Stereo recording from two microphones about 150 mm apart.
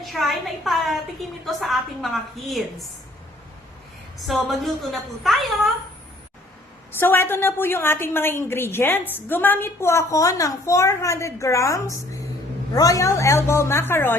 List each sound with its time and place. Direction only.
0.0 s a woman's voice: centre (ahead or behind)
4.3 s a woman's voice: centre (ahead or behind)
7.0 s a woman's voice: 15° left (ahead or behind)